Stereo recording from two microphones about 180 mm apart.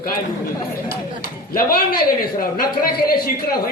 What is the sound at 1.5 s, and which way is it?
A man's voice, 55° left (ahead or behind).